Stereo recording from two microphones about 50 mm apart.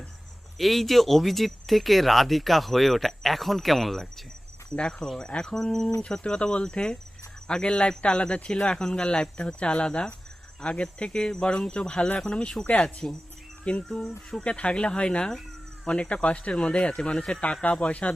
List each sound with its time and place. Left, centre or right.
0.6 s speech: centre
4.7 s cricket: centre
7.4 s speech: centre
12.2 s cricket: centre
13.7 s speech: left
16.9 s cricket: centre
17.4 s speech: left